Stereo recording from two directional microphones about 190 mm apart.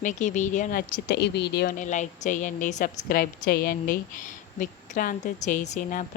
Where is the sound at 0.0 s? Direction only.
40° left (ahead or behind); by 1.7 s 60° left (ahead or behind).